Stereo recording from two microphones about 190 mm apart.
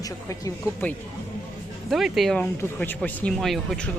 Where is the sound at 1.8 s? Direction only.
Centre (ahead or behind).